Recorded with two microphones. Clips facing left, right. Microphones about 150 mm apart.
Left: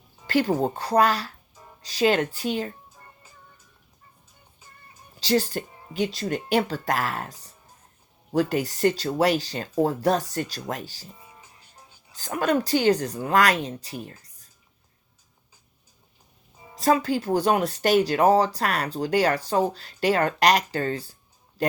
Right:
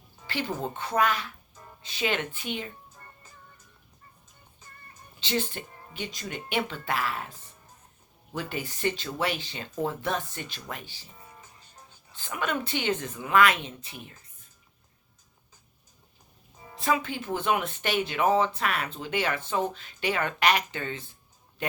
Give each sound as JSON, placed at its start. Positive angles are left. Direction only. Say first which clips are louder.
{"t": 0.3, "sound": "speech", "louder": "left 9 dB", "side_deg": 40}
{"t": 2.9, "sound": "music", "louder": "left 1 dB", "side_deg": 10}
{"t": 5.2, "sound": "speech", "louder": "left 7 dB", "side_deg": 40}
{"t": 11.2, "sound": "music", "louder": "even", "side_deg": 10}
{"t": 12.1, "sound": "speech", "louder": "left 7 dB", "side_deg": 40}
{"t": 16.7, "sound": "speech", "louder": "left 6 dB", "side_deg": 40}